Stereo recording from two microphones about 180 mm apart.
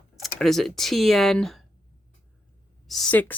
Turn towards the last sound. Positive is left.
turn(degrees=10)  # may be behind; listen again after turning